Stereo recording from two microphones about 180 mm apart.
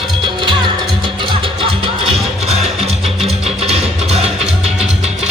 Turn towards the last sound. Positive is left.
turn(degrees=-35)  # may be behind; listen again after turning